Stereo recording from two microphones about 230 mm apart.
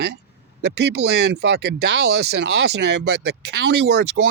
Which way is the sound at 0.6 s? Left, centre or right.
Right.